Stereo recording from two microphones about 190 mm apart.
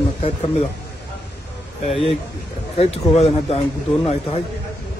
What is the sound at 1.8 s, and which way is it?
Speech, 30° left (ahead or behind).